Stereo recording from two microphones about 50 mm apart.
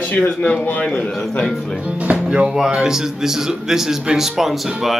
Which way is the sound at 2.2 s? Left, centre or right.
Centre.